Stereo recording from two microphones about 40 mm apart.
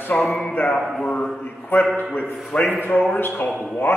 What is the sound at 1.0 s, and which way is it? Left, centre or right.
Speech, centre.